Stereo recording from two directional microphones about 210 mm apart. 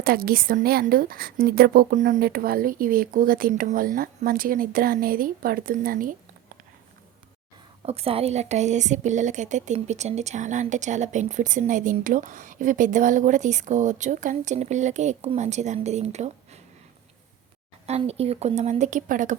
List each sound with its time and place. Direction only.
0.0 s a woman's voice: 45° right (ahead or behind)
7.8 s speech: 30° right (ahead or behind)
17.8 s speech: 30° right (ahead or behind)